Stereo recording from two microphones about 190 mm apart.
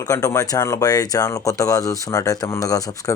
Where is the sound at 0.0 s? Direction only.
20° left (ahead or behind).